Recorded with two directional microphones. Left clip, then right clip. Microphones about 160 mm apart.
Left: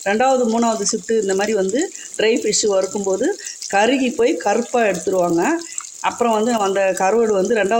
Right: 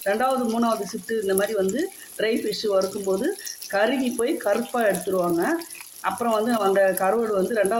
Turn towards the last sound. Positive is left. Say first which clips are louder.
# left 5 dB
turn(degrees=45)  # may be behind; listen again after turning